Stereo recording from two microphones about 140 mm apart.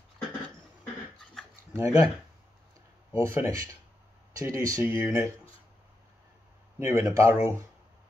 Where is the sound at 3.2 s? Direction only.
20° right (ahead or behind).